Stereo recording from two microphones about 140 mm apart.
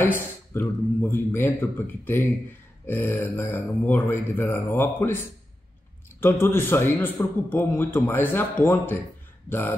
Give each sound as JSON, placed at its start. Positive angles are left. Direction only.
{"t": 0.0, "sound": "a man's voice", "side_deg": 15}
{"t": 6.2, "sound": "a man's voice", "side_deg": 15}